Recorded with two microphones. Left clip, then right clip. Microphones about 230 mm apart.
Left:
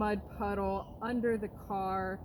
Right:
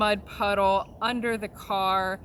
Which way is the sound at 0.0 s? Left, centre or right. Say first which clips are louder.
Right 10 dB; centre.